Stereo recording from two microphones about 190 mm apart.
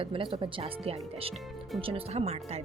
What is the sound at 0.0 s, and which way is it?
Speech, 25° right (ahead or behind).